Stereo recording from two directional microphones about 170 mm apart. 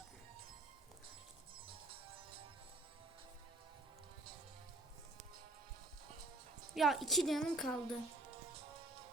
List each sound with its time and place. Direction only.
1.6 s music: 30° right (ahead or behind)
6.7 s a woman's voice: centre (ahead or behind)